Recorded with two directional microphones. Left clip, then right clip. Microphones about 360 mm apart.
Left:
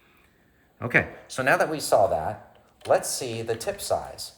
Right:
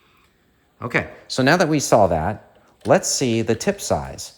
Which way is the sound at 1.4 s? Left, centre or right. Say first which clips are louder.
Right 5 dB; centre.